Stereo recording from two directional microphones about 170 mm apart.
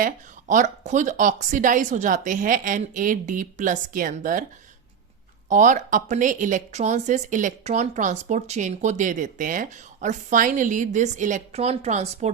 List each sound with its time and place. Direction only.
0.0 s speech: 50° right (ahead or behind)
5.5 s speech: 50° right (ahead or behind)